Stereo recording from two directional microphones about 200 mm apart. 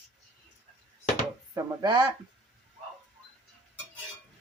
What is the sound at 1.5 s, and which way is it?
Female singing, 20° right (ahead or behind).